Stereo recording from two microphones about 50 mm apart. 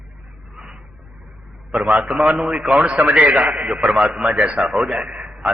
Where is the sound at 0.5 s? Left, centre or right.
Centre.